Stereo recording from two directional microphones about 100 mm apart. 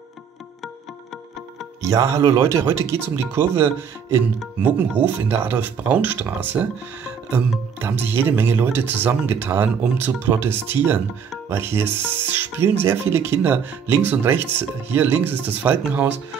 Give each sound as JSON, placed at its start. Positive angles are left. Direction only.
{"t": 1.8, "sound": "speech", "side_deg": -35}
{"t": 7.8, "sound": "speech", "side_deg": -20}